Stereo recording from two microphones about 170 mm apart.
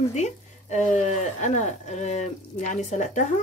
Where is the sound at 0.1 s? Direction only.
45° left (ahead or behind).